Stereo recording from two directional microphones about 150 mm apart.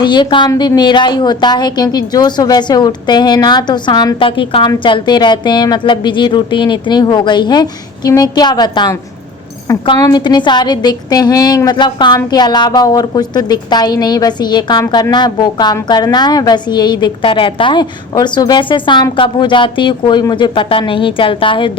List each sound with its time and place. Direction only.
0.0 s a woman's voice: 30° left (ahead or behind)
10.0 s a woman's voice: 30° left (ahead or behind)